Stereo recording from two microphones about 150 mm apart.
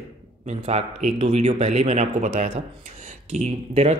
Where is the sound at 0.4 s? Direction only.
45° right (ahead or behind).